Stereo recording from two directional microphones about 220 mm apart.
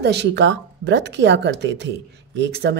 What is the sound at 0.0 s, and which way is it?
Speech, 50° right (ahead or behind).